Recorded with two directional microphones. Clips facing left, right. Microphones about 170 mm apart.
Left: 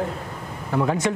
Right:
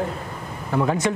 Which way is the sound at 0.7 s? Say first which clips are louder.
Right 1 dB; 30° right (ahead or behind).